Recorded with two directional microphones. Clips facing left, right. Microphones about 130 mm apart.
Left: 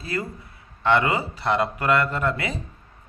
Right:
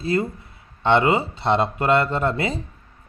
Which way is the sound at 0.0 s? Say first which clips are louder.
Right 7 dB; 25° right (ahead or behind).